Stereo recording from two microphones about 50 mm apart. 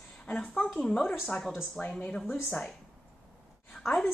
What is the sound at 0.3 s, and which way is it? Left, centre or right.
A woman's voice, left.